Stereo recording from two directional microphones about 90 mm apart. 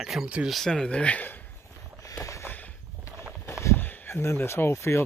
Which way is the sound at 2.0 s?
35° left (ahead or behind).